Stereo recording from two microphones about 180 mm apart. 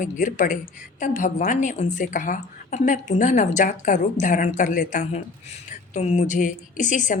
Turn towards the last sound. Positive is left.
turn(degrees=45)  # may be behind; listen again after turning